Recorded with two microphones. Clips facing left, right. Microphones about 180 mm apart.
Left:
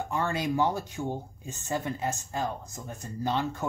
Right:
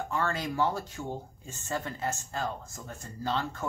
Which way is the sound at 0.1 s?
20° left (ahead or behind).